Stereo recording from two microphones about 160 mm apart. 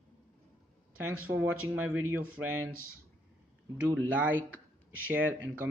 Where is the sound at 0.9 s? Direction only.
10° right (ahead or behind).